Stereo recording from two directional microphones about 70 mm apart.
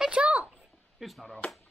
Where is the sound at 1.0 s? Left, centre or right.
Centre.